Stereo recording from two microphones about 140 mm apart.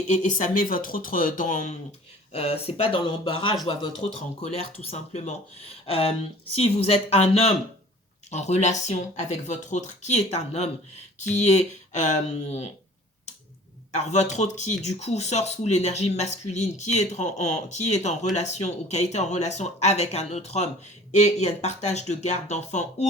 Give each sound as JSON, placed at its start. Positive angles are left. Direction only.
{"t": 0.1, "sound": "speech", "side_deg": 65}
{"t": 2.3, "sound": "speech", "side_deg": 45}
{"t": 5.8, "sound": "speech", "side_deg": 40}
{"t": 13.9, "sound": "speech", "side_deg": 55}